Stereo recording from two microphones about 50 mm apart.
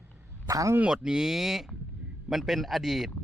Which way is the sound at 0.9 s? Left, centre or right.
Centre.